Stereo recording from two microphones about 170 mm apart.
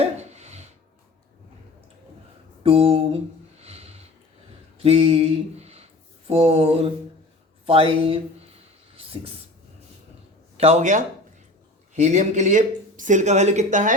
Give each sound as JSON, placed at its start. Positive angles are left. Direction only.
{"t": 0.0, "sound": "a sound", "side_deg": -40}
{"t": 2.6, "sound": "speech", "side_deg": -35}
{"t": 3.6, "sound": "sniff", "side_deg": -35}
{"t": 4.8, "sound": "speech", "side_deg": -35}
{"t": 10.6, "sound": "speech", "side_deg": -40}